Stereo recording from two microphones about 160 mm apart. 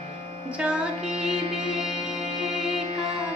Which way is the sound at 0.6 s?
5° right (ahead or behind).